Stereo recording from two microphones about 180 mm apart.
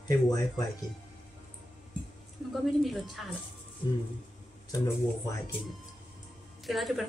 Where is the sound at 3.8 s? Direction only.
25° left (ahead or behind).